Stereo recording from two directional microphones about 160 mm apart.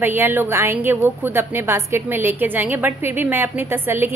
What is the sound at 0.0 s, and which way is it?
A woman's voice, 15° right (ahead or behind).